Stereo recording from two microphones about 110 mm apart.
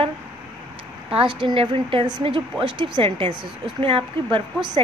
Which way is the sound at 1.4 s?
55° right (ahead or behind).